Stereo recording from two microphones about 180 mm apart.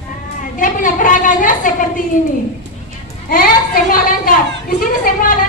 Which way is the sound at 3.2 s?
55° left (ahead or behind).